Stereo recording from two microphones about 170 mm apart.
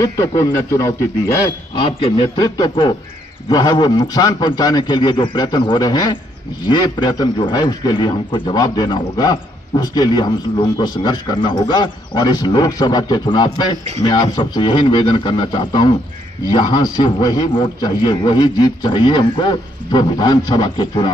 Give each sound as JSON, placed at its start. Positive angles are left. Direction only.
{"t": 0.0, "sound": "a man's voice", "side_deg": 20}